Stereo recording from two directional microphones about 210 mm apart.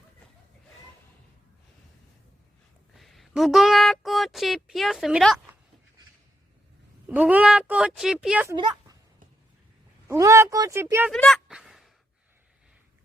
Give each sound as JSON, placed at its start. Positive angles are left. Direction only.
{"t": 2.9, "sound": "speech", "side_deg": 0}
{"t": 7.1, "sound": "speech", "side_deg": -5}
{"t": 8.5, "sound": "a woman's voice", "side_deg": -20}
{"t": 10.1, "sound": "speech", "side_deg": -15}
{"t": 11.1, "sound": "a sound", "side_deg": 0}